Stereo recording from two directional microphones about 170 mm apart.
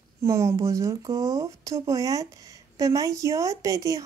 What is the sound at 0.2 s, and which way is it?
A woman's voice, 15° right (ahead or behind).